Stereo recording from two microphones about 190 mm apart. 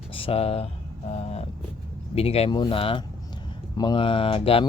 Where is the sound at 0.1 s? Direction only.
30° left (ahead or behind).